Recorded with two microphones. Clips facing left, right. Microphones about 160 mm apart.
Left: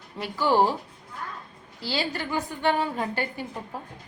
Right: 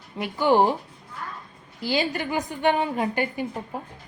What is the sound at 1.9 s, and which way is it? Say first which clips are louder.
A woman's voice: right 4 dB; 15° right (ahead or behind).